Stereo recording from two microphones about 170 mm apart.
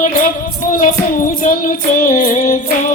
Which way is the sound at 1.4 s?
55° left (ahead or behind).